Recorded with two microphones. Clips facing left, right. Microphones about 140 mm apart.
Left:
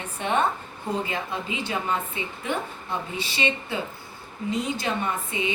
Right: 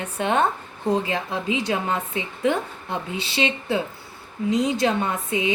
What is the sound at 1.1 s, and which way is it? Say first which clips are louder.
A woman's voice: right 5 dB; 90° right.